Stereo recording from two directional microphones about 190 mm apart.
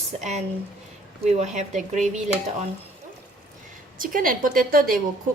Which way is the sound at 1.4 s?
40° right (ahead or behind).